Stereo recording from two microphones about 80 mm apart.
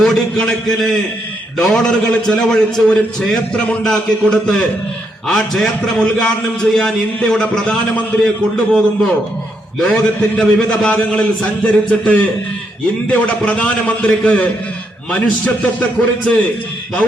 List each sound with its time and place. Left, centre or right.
0.0 s a man's voice: centre